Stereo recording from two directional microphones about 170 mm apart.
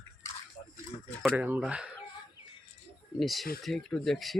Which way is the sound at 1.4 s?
5° right (ahead or behind).